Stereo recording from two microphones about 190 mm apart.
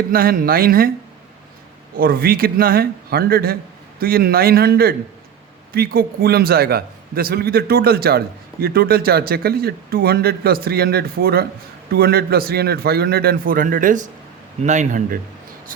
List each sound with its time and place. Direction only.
0.1 s speech: 50° right (ahead or behind)
2.0 s a man's voice: 50° right (ahead or behind)